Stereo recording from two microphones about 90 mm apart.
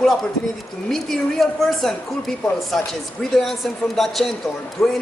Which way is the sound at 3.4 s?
Centre (ahead or behind).